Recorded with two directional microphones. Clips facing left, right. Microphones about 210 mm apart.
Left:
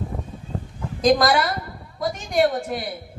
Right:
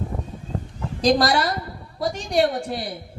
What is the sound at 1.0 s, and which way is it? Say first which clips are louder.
Speech: left 1 dB; 30° right (ahead or behind).